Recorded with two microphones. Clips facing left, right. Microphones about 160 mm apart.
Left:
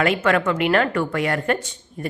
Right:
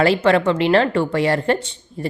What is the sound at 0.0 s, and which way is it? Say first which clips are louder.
A woman's voice: right 4 dB; 30° right (ahead or behind).